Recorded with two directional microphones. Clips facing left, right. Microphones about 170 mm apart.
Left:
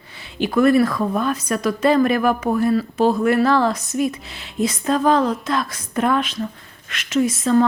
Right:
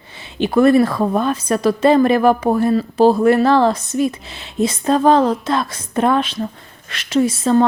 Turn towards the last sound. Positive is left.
turn(degrees=-30)  # may be behind; listen again after turning